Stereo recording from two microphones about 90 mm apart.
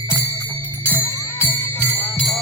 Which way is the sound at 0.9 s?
20° left (ahead or behind).